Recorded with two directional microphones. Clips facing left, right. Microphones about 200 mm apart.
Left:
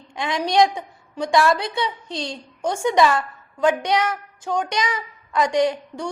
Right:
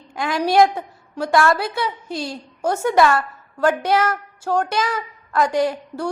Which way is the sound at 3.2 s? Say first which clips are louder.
Right 1 dB; 5° right (ahead or behind).